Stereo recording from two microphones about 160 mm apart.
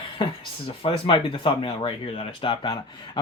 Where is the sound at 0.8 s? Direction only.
35° left (ahead or behind).